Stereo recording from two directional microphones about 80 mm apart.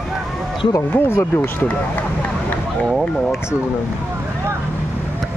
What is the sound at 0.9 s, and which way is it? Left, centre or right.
Speech, left.